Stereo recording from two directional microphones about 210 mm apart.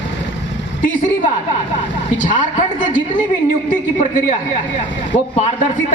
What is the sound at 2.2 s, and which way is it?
A woman's voice, 35° left (ahead or behind).